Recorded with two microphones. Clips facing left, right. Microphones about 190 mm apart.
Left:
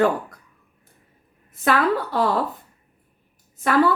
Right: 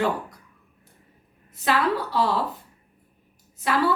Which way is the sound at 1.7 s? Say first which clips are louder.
Left 3 dB; 55° left (ahead or behind).